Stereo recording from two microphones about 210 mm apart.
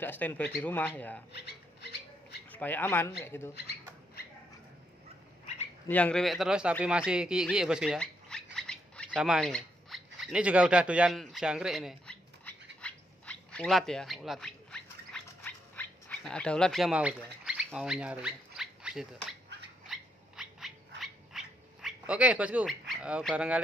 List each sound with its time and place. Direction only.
0.0 s speech: 10° left (ahead or behind)
1.3 s rodents: 50° left (ahead or behind)
2.5 s speech: 10° left (ahead or behind)
3.5 s rodents: 50° left (ahead or behind)
5.9 s speech: 5° left (ahead or behind)
8.5 s squawk: 5° left (ahead or behind)
9.1 s a sound: 5° right (ahead or behind)
19.9 s cat: centre (ahead or behind)